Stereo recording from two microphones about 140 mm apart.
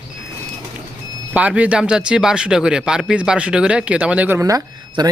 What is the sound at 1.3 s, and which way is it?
A man's voice, 10° right (ahead or behind).